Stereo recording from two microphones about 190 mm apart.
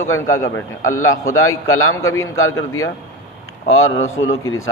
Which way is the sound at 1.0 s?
90° left.